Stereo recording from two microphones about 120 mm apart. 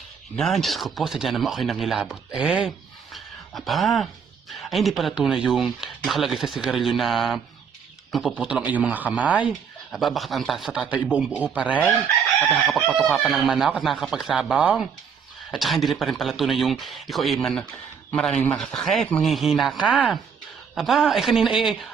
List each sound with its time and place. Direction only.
0.3 s a man's voice: centre (ahead or behind)
9.9 s a man's voice: centre (ahead or behind)